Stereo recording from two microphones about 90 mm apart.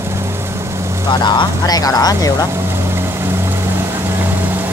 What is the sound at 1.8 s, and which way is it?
Speech, 45° left (ahead or behind).